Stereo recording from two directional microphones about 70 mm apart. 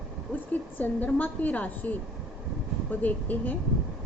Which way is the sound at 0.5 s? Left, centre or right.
Left.